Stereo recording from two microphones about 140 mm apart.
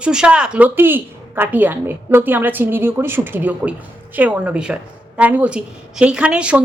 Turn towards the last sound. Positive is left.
turn(degrees=-10)  # may be behind; listen again after turning